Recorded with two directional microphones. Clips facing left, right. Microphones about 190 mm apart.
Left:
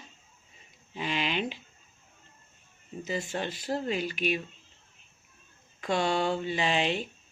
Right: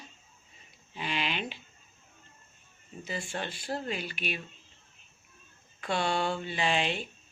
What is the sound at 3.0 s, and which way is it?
Speech, 40° left (ahead or behind).